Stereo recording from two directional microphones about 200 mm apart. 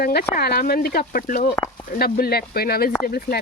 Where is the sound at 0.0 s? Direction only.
50° left (ahead or behind).